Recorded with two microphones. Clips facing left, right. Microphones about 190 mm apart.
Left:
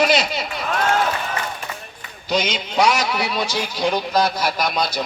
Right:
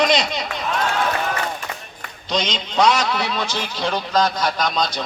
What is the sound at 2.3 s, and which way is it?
A man's voice, 10° left (ahead or behind).